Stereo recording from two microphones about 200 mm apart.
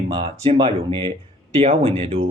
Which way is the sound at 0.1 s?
25° right (ahead or behind).